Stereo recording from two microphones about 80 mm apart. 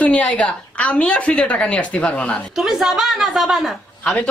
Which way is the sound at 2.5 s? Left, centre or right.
Centre.